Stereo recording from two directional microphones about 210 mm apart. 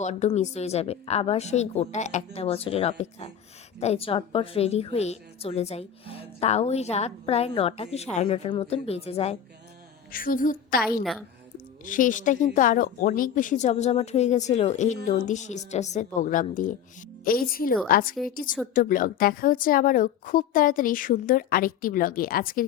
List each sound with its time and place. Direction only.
0.0 s a woman's voice: 35° left (ahead or behind)
10.1 s a woman's voice: 40° left (ahead or behind)